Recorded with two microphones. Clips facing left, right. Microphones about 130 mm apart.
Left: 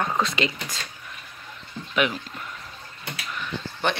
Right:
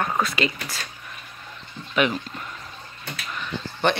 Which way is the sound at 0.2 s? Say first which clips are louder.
Right 1 dB; 20° left (ahead or behind).